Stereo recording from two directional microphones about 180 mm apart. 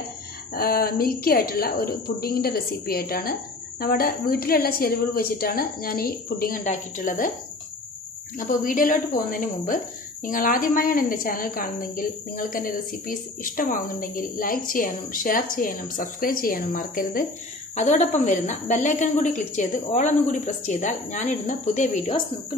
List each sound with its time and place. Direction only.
0.6 s a woman's voice: 55° left (ahead or behind)
8.4 s a woman's voice: 50° left (ahead or behind)
17.7 s a woman's voice: 40° left (ahead or behind)